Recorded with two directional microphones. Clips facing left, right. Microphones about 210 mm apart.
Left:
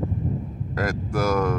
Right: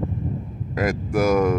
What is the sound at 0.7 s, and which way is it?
Speech, 15° right (ahead or behind).